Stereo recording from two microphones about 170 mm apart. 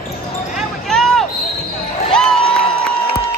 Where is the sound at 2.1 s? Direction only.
5° left (ahead or behind).